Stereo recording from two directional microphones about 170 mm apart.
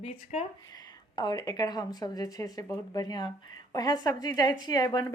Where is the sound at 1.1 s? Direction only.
25° left (ahead or behind).